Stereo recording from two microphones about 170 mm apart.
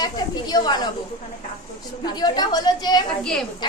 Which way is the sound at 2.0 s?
25° left (ahead or behind).